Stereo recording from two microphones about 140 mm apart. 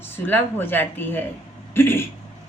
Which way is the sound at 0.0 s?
15° left (ahead or behind).